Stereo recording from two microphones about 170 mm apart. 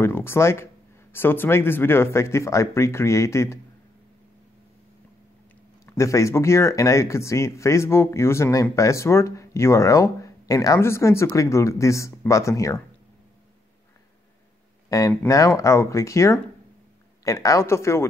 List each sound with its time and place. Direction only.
0.0 s speech: 15° left (ahead or behind)
5.9 s speech: 15° left (ahead or behind)
14.9 s speech: 20° left (ahead or behind)